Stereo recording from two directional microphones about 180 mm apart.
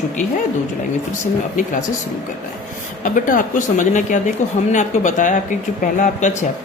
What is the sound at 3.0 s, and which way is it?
Speech, 45° left (ahead or behind).